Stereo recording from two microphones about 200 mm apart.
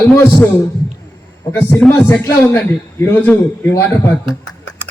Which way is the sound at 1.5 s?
10° left (ahead or behind).